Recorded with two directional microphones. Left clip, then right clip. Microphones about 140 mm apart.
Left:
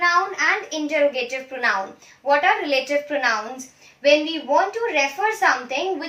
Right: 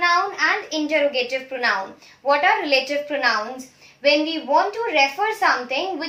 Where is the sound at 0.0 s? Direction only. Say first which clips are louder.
Even; 25° right (ahead or behind).